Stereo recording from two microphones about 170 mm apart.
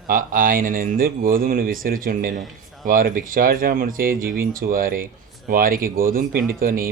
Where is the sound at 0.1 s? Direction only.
50° right (ahead or behind).